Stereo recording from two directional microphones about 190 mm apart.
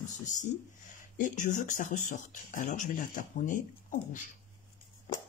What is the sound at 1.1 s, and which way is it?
Speech, 45° left (ahead or behind).